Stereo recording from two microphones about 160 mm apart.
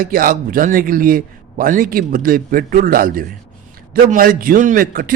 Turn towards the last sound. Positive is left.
turn(degrees=-60)  # may be behind; listen again after turning